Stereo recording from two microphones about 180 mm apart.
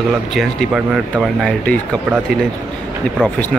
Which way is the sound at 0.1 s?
Centre (ahead or behind).